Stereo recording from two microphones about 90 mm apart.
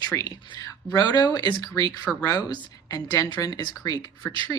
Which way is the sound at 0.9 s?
45° left (ahead or behind).